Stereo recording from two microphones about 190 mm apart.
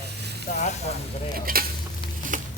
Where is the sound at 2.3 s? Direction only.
45° right (ahead or behind).